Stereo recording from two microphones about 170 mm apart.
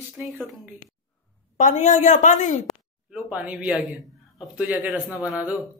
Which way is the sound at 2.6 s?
Centre (ahead or behind).